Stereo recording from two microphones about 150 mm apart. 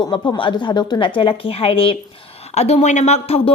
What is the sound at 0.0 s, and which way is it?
A woman's voice, 30° left (ahead or behind).